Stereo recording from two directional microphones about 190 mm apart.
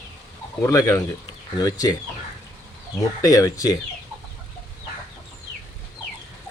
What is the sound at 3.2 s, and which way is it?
Speech, 20° left (ahead or behind).